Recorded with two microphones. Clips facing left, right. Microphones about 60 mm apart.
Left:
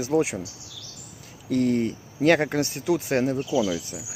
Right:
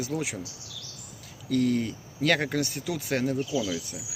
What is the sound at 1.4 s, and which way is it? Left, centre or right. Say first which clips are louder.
Speech: left 3 dB; left.